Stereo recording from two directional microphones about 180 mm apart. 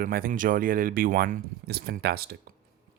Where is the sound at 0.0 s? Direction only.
55° right (ahead or behind).